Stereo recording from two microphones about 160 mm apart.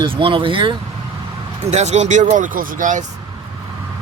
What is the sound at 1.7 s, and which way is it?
Speech, 45° right (ahead or behind).